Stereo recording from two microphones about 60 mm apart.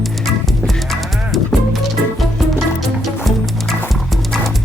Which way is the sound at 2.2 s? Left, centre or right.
Centre.